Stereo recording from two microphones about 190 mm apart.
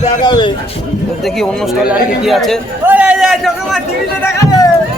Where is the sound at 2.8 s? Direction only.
10° right (ahead or behind).